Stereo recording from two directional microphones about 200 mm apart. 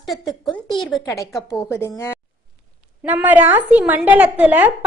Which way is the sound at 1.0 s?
15° left (ahead or behind).